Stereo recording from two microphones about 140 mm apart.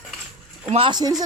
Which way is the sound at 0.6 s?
45° right (ahead or behind).